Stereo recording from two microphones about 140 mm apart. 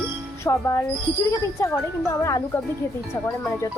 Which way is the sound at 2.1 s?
20° left (ahead or behind).